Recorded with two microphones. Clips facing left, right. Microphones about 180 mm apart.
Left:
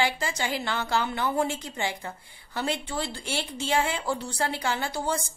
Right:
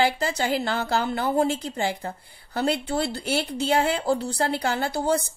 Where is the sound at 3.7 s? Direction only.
40° right (ahead or behind).